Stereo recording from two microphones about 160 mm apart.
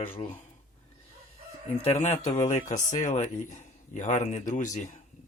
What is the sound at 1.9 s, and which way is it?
Speech, 45° left (ahead or behind).